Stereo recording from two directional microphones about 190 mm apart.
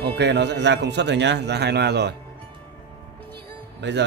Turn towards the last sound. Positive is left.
turn(degrees=-65)  # may be behind; listen again after turning